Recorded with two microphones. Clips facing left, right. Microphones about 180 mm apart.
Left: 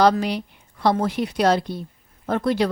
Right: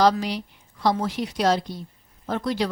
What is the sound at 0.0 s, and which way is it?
A woman's voice, 55° left (ahead or behind).